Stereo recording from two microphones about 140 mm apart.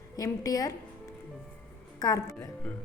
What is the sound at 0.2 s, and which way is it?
Speech, 25° left (ahead or behind).